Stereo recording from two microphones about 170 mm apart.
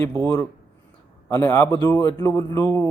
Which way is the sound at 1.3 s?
15° left (ahead or behind).